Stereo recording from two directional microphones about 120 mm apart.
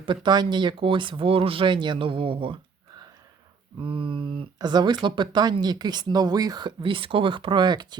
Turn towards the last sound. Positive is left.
turn(degrees=-40)  # may be behind; listen again after turning